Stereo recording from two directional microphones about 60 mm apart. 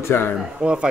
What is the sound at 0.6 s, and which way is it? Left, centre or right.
Speech, centre.